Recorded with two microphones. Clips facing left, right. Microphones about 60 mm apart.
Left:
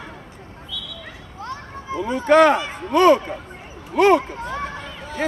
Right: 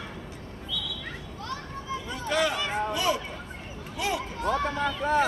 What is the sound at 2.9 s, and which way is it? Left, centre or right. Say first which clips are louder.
Speech: left 13 dB; left.